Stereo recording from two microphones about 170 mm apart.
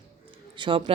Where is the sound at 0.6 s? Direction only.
30° right (ahead or behind).